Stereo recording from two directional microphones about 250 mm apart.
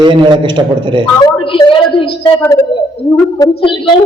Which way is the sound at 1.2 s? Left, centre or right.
Centre.